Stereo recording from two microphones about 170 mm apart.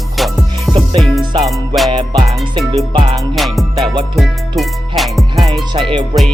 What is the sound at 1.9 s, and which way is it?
Music, 25° right (ahead or behind).